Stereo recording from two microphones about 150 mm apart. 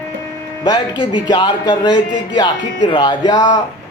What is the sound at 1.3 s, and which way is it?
Speech, 30° left (ahead or behind).